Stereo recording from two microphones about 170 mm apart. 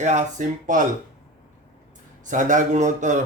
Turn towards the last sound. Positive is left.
turn(degrees=-45)  # may be behind; listen again after turning